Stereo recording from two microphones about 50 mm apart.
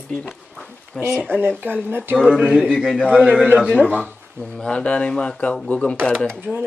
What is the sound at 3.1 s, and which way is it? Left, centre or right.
Speech, right.